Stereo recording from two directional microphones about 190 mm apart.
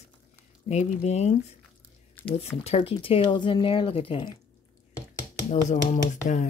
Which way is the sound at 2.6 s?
30° left (ahead or behind).